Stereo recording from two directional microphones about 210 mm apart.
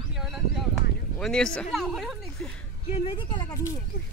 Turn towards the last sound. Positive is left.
turn(degrees=20)  # may be behind; listen again after turning